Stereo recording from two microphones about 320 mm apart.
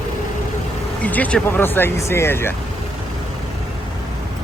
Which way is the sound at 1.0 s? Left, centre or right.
Centre.